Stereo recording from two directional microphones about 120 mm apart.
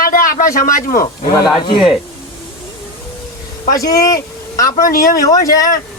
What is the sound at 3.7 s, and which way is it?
A man's voice, 30° left (ahead or behind).